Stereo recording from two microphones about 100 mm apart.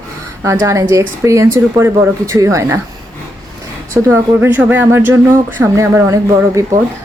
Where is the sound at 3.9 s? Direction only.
25° right (ahead or behind).